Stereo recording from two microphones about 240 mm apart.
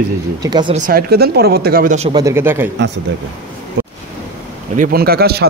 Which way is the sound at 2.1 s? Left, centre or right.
Centre.